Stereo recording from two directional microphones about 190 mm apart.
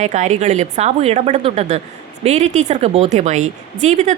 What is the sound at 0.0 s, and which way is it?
Speech, 35° right (ahead or behind).